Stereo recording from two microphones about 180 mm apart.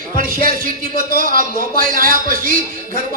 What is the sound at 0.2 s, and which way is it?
Speech, 50° right (ahead or behind).